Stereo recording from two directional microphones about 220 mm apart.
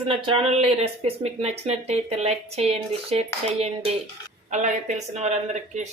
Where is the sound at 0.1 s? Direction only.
25° right (ahead or behind).